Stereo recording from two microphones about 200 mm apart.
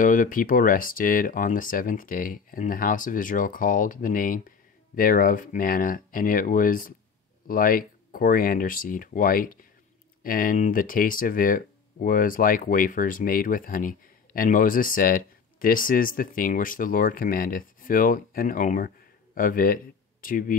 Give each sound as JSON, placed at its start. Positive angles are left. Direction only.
{"t": 0.0, "sound": "speech", "side_deg": 40}